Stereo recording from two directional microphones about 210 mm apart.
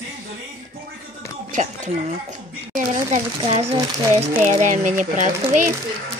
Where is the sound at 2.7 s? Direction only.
40° right (ahead or behind).